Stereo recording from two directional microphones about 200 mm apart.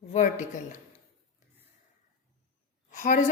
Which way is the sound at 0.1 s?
40° left (ahead or behind).